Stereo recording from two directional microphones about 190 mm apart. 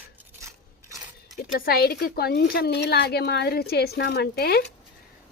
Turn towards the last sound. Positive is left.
turn(degrees=55)  # may be behind; listen again after turning